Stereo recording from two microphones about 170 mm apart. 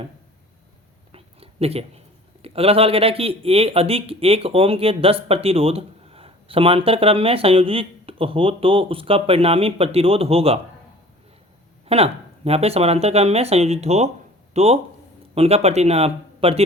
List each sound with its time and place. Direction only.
1.1 s a sound: 35° right (ahead or behind)
2.4 s speech: 35° right (ahead or behind)
11.9 s speech: 35° right (ahead or behind)